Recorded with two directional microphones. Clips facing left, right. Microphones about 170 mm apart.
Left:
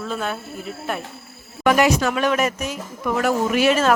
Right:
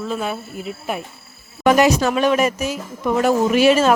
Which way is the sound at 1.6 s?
30° right (ahead or behind).